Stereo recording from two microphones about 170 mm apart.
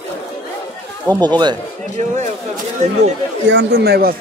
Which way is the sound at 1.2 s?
25° right (ahead or behind).